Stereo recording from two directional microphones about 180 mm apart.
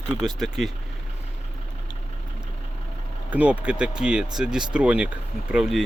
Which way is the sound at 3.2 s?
10° right (ahead or behind).